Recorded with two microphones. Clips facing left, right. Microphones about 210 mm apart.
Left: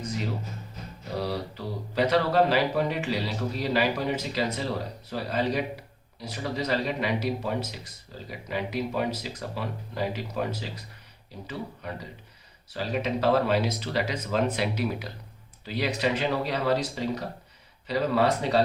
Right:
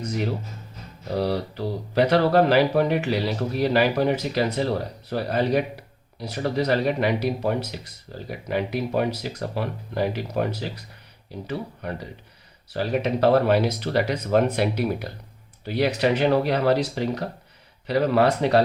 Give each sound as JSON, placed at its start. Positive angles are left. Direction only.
{"t": 0.0, "sound": "speech", "side_deg": -70}